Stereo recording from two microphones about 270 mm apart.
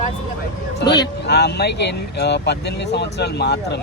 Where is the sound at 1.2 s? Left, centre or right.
Left.